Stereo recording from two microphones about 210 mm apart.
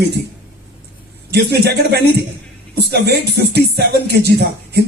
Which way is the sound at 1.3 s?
50° right (ahead or behind).